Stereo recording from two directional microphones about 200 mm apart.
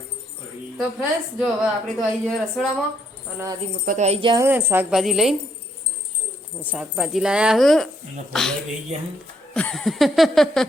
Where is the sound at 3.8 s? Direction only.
35° right (ahead or behind).